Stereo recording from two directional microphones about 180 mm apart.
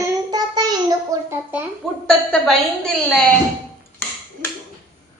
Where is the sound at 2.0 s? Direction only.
5° left (ahead or behind).